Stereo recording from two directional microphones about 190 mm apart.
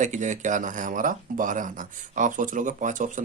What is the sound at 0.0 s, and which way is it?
Speech, 40° right (ahead or behind).